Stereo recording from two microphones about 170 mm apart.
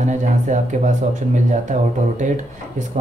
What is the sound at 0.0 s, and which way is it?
Speech, 45° right (ahead or behind).